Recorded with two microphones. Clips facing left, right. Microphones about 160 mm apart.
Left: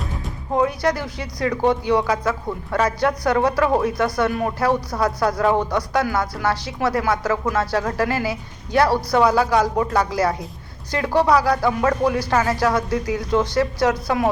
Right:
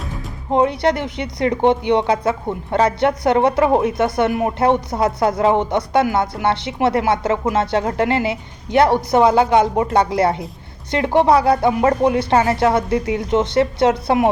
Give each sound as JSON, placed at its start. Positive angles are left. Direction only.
{"t": 0.5, "sound": "speech", "side_deg": -25}